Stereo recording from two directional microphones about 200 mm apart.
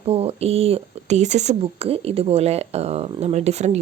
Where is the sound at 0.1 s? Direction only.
30° right (ahead or behind).